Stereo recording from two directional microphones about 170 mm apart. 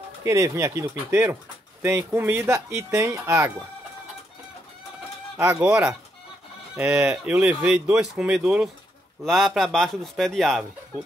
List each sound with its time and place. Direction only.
0.2 s speech: 15° right (ahead or behind)
5.4 s a man's voice: 10° right (ahead or behind)